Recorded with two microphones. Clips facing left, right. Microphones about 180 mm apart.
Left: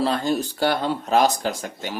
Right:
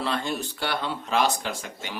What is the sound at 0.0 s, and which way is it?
Speech, 40° left (ahead or behind).